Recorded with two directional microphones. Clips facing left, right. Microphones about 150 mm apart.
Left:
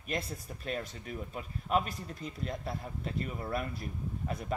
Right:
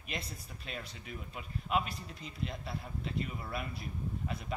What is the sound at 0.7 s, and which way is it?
Speech, 45° left (ahead or behind).